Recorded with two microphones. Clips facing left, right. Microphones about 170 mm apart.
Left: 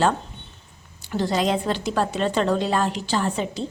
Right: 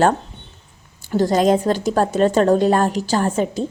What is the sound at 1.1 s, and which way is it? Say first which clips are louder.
Speech: right 7 dB; 45° right (ahead or behind).